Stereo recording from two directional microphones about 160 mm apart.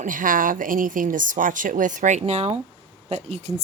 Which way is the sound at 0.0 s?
55° right (ahead or behind).